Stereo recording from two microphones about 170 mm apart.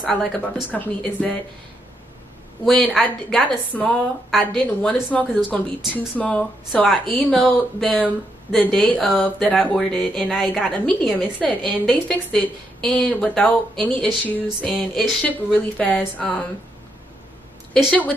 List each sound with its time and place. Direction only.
0.0 s a woman's voice: centre (ahead or behind)
2.6 s a woman's voice: 5° left (ahead or behind)
11.1 s a woman's voice: 5° right (ahead or behind)
11.4 s a woman's voice: 5° left (ahead or behind)